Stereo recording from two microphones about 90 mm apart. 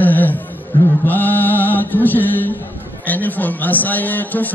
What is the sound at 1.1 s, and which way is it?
Mantra, 20° left (ahead or behind).